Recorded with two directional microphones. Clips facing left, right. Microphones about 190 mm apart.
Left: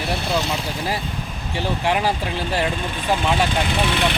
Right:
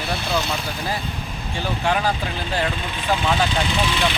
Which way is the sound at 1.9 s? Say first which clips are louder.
Even; 25° left (ahead or behind).